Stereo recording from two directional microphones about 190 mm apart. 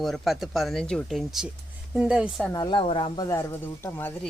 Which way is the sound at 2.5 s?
25° left (ahead or behind).